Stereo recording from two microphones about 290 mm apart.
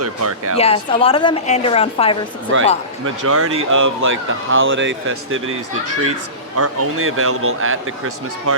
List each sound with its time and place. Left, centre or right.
0.0 s speech: right
0.5 s a woman's voice: centre
2.5 s speech: right
6.6 s speech: right